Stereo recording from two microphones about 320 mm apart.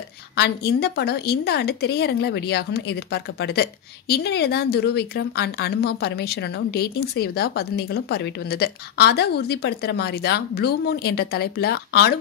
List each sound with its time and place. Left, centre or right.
0.4 s a woman's voice: left